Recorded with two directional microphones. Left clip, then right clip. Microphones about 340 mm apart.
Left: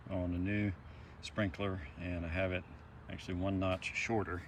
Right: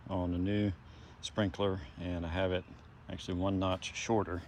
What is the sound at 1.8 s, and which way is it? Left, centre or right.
Speech, right.